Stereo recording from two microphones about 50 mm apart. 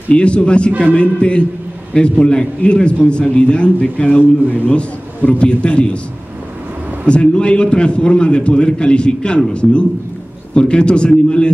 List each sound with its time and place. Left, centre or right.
0.1 s a man's voice: left
7.1 s a man's voice: left